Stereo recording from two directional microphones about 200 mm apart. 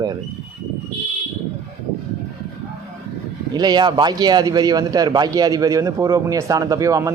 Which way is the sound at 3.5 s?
20° right (ahead or behind).